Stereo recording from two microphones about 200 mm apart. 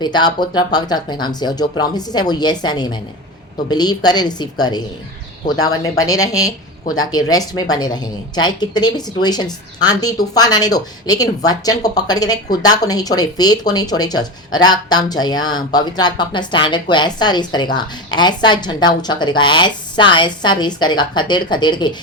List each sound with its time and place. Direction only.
0.0 s a woman's voice: 20° left (ahead or behind)